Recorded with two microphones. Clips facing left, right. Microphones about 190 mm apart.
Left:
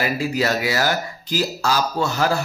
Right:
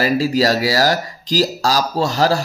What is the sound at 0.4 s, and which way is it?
Speech, 35° right (ahead or behind).